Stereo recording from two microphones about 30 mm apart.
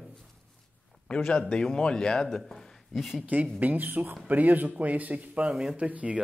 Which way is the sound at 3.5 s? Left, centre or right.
Right.